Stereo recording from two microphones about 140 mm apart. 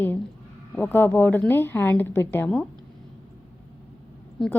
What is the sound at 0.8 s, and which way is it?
A woman's voice, 15° left (ahead or behind).